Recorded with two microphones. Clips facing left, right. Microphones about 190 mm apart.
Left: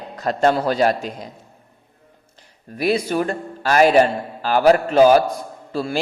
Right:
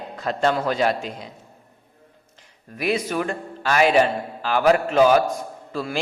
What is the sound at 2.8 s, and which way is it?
A man's voice, 35° left (ahead or behind).